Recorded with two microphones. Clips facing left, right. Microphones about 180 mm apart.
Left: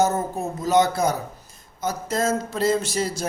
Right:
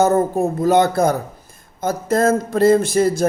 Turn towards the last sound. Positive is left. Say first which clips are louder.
# right 9 dB
turn(degrees=-55)  # may be behind; listen again after turning